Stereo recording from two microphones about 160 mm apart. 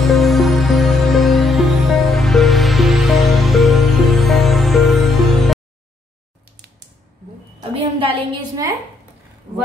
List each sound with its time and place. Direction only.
0.0 s music: centre (ahead or behind)
7.7 s a woman's voice: 35° right (ahead or behind)